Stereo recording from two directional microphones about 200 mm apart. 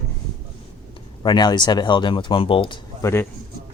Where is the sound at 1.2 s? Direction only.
20° left (ahead or behind).